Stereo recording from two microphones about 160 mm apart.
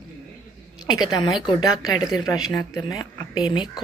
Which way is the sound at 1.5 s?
25° left (ahead or behind).